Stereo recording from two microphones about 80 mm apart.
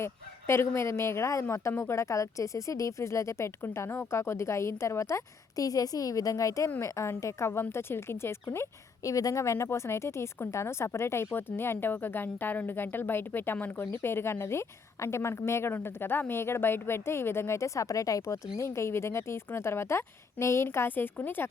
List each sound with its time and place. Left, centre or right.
0.0 s speech: left
9.0 s speech: left